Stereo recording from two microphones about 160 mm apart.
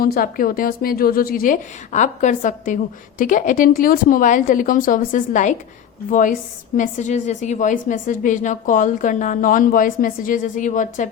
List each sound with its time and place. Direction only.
0.0 s a woman's voice: 65° left (ahead or behind)